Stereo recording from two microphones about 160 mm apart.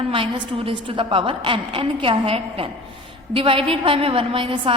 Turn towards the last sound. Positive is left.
turn(degrees=-35)  # may be behind; listen again after turning